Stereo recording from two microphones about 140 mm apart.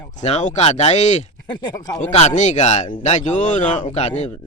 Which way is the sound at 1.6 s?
30° left (ahead or behind).